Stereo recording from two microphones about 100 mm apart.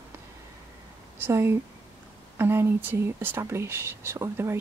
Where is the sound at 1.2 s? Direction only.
25° right (ahead or behind).